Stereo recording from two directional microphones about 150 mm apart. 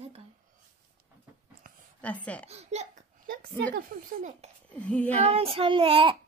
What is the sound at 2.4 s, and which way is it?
Speech, 45° right (ahead or behind).